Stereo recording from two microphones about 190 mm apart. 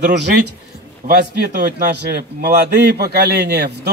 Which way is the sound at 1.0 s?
40° right (ahead or behind).